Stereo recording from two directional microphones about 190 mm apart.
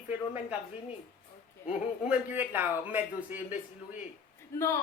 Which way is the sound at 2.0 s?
10° right (ahead or behind).